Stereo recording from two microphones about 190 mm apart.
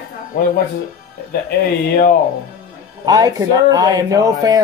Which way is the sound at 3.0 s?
20° right (ahead or behind).